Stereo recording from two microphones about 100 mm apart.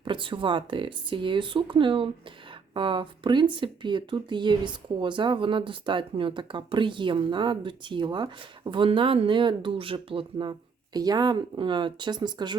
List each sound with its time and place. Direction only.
0.0 s speech: 55° right (ahead or behind)
8.9 s speech: 70° right (ahead or behind)
10.9 s speech: 40° right (ahead or behind)